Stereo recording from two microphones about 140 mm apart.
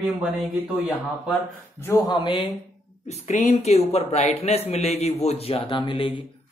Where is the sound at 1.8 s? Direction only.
25° left (ahead or behind).